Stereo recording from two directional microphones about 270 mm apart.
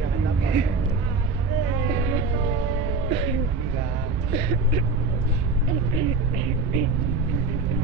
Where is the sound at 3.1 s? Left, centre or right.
Centre.